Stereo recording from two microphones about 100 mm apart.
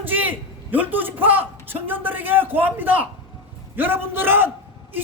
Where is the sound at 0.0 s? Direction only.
20° right (ahead or behind).